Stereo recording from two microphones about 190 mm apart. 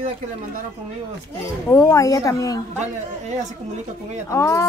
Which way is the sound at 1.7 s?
15° left (ahead or behind).